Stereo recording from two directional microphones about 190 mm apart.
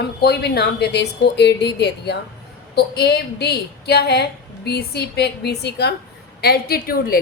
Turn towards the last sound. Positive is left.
turn(degrees=50)  # may be behind; listen again after turning